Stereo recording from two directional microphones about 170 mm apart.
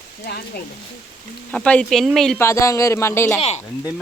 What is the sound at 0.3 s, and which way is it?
Speech, 65° left (ahead or behind).